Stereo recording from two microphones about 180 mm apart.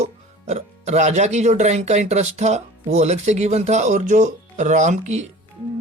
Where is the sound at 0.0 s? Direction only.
40° right (ahead or behind).